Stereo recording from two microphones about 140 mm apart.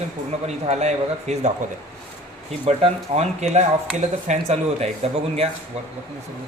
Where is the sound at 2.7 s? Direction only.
50° right (ahead or behind).